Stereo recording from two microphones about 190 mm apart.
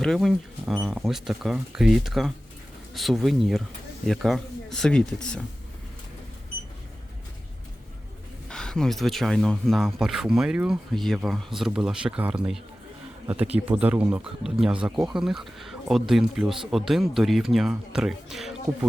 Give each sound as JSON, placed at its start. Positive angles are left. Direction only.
{"t": 0.0, "sound": "speech", "side_deg": 0}
{"t": 8.4, "sound": "speech", "side_deg": 5}